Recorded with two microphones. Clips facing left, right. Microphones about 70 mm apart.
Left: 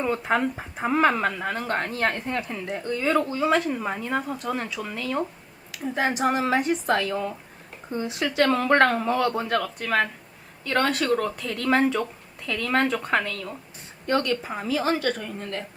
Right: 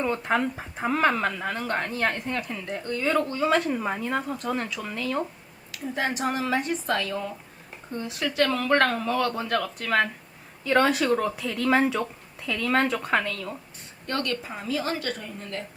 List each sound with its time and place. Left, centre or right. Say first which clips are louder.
0.0 s speech: left 1 dB; centre
5.8 s speech: left 3 dB; centre
6.2 s a woman's voice: left 6 dB; left
6.9 s speech: left 3 dB; centre
8.4 s speech: left 4 dB; left
9.2 s speech: left 2 dB; centre
14.1 s speech: left 5 dB; centre